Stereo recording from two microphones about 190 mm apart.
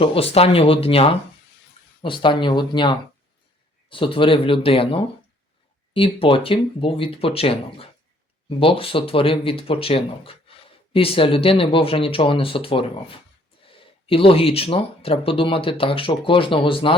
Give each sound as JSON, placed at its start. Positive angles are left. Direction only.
{"t": 0.0, "sound": "speech", "side_deg": 30}